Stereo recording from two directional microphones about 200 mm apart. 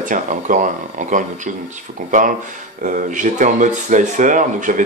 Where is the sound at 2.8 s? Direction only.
40° right (ahead or behind).